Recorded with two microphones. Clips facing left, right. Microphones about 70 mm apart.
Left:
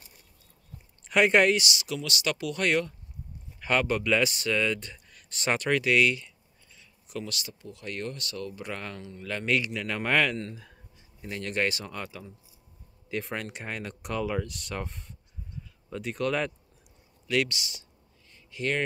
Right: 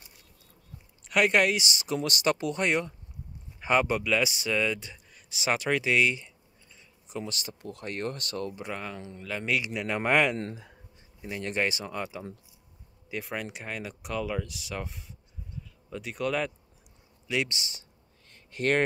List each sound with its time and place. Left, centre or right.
1.0 s speech: centre
1.6 s speech: right
2.6 s speech: centre; by 8.5 s right
8.7 s speech: centre
10.3 s speech: right
11.1 s a man's voice: centre
13.1 s speech: centre
17.3 s speech: right
18.3 s a sound: right